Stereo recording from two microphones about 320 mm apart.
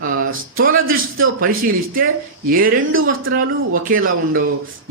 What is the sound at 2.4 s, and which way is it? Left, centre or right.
Speech, right.